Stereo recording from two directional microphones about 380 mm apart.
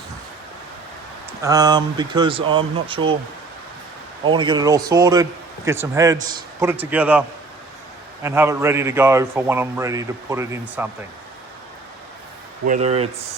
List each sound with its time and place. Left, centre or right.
1.4 s a man's voice: centre
4.3 s a man's voice: centre
12.6 s a man's voice: centre